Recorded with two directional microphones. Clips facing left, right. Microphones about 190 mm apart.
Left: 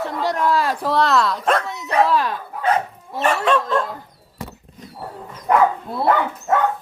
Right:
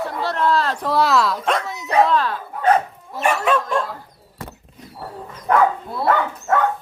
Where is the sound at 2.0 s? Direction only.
10° left (ahead or behind).